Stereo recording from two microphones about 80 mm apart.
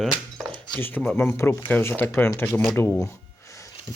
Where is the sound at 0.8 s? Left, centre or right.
Left.